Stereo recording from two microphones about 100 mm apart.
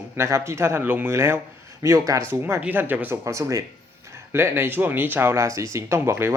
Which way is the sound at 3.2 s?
30° right (ahead or behind).